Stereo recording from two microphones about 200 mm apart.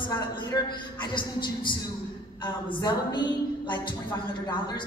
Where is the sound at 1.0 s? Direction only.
25° left (ahead or behind).